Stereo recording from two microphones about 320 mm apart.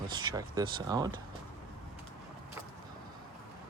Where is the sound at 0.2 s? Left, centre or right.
Centre.